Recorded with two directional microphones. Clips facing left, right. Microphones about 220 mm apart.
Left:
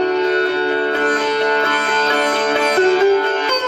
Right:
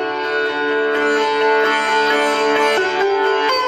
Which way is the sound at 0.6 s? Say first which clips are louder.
Right 1 dB; 35° left (ahead or behind).